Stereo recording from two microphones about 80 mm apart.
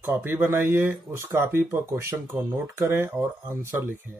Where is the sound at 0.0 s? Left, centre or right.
Right.